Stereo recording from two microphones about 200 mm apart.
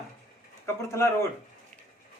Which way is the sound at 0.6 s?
15° left (ahead or behind).